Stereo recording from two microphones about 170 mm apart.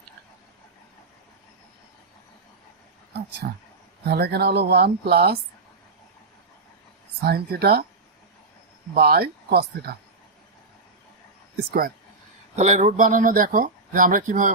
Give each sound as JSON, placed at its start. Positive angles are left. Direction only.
{"t": 3.4, "sound": "speech", "side_deg": -60}
{"t": 4.0, "sound": "speech", "side_deg": -70}
{"t": 7.3, "sound": "speech", "side_deg": -65}
{"t": 9.0, "sound": "speech", "side_deg": -65}
{"t": 12.5, "sound": "speech", "side_deg": -45}